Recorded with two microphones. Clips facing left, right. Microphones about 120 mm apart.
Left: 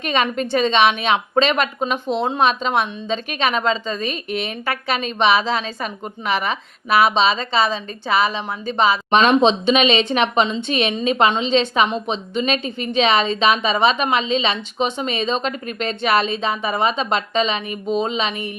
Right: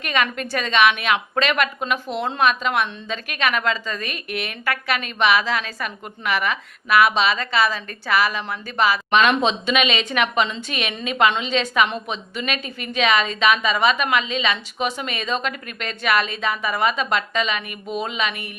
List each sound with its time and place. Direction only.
0.0 s a woman's voice: 30° left (ahead or behind)